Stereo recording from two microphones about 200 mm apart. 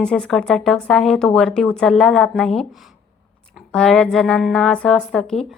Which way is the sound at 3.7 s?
5° left (ahead or behind).